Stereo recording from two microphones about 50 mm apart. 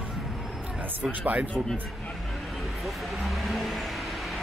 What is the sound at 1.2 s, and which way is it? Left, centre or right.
Speech, right.